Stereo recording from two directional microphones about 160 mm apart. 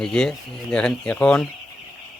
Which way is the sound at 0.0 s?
5° left (ahead or behind).